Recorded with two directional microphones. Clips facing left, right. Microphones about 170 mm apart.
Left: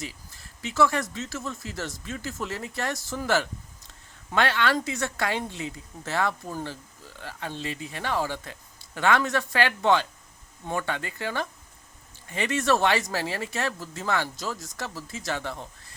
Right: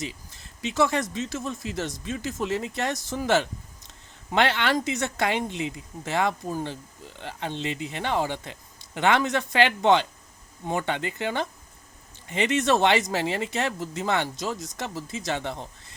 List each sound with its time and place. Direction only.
0.0 s speech: 20° right (ahead or behind)